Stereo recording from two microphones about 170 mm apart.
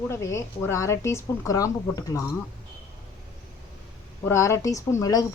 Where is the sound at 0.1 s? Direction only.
15° left (ahead or behind).